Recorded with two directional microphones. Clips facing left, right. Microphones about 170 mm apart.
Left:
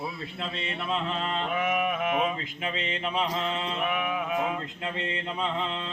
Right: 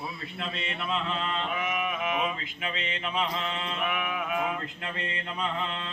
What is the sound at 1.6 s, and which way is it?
Music, 50° left (ahead or behind).